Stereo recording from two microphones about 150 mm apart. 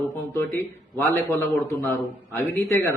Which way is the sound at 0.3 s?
15° left (ahead or behind).